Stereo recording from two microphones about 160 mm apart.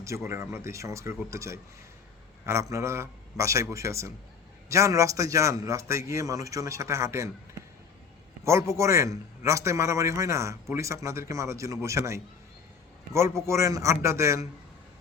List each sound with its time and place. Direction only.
0.0 s a man's voice: 20° right (ahead or behind)
8.4 s a man's voice: 15° right (ahead or behind)